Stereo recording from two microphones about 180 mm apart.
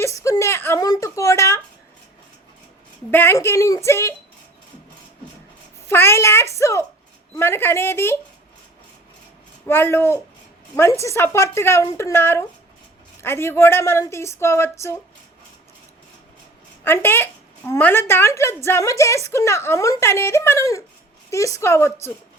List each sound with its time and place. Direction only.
0.0 s a sound: 15° left (ahead or behind)
3.1 s a woman's voice: 10° left (ahead or behind)
5.9 s a woman's voice: 15° left (ahead or behind)
9.6 s a woman's voice: 15° left (ahead or behind)
16.8 s a woman's voice: 10° left (ahead or behind)